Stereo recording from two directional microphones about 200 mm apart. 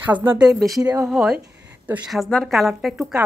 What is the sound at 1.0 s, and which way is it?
A woman's voice, 5° right (ahead or behind).